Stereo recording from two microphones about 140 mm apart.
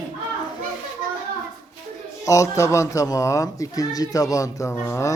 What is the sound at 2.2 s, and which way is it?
Speech, 20° left (ahead or behind).